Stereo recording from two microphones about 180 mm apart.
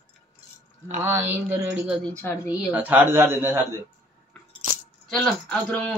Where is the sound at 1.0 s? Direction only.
15° right (ahead or behind).